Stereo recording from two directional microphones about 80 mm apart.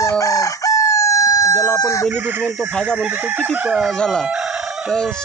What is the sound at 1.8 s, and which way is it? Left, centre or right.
Chicken, left.